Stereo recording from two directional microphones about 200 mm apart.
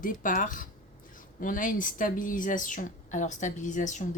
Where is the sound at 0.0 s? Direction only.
40° left (ahead or behind).